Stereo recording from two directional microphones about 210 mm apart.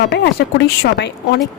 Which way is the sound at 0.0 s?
55° left (ahead or behind).